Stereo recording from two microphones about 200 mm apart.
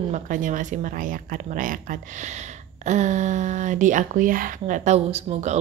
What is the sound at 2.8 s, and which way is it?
Speech, 35° right (ahead or behind).